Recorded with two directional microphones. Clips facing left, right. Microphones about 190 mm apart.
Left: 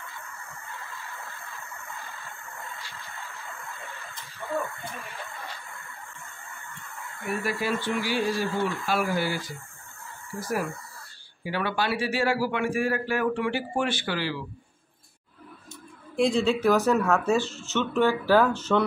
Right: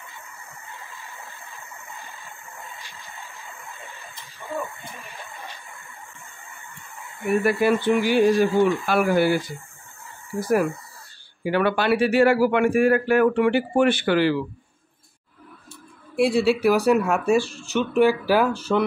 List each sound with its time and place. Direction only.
0.7 s vehicle: 15° right (ahead or behind)
7.4 s speech: 60° right (ahead or behind)
7.9 s speech: 15° right (ahead or behind)
8.8 s speech: 60° right (ahead or behind)
10.4 s speech: 60° right (ahead or behind)
16.2 s speech: 10° right (ahead or behind)